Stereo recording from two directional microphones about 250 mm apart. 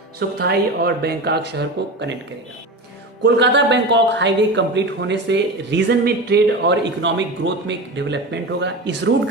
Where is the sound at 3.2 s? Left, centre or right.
Right.